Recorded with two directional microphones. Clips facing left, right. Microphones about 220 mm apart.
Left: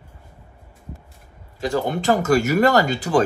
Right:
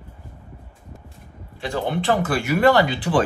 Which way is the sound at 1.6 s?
45° left (ahead or behind).